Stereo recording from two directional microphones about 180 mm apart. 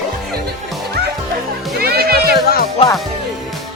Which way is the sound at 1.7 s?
60° right (ahead or behind).